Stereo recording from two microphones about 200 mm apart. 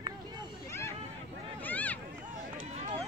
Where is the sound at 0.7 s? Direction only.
15° left (ahead or behind).